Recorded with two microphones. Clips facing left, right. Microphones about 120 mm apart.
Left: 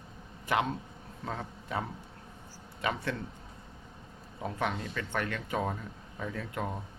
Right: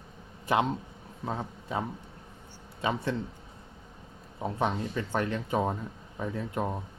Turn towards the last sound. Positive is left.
turn(degrees=-20)  # may be behind; listen again after turning